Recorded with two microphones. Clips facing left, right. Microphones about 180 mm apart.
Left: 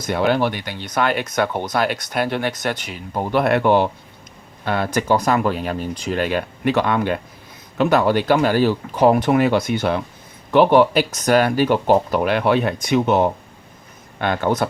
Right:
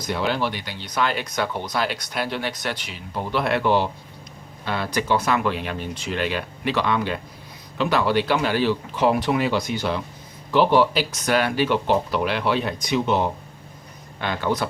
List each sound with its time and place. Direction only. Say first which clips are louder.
0.0 s speech: left 6 dB; 55° left (ahead or behind)